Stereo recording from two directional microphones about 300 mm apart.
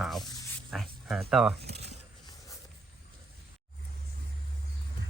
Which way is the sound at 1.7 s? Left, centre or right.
Right.